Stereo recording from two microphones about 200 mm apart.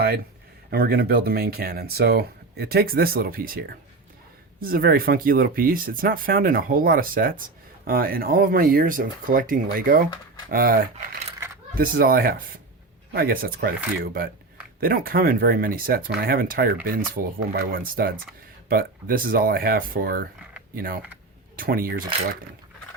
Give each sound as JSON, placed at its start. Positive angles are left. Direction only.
{"t": 0.7, "sound": "speech", "side_deg": -50}